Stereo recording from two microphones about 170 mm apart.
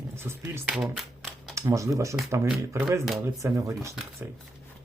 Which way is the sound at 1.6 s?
15° right (ahead or behind).